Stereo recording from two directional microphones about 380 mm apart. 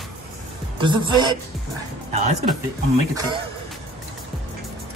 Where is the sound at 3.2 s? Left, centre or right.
Centre.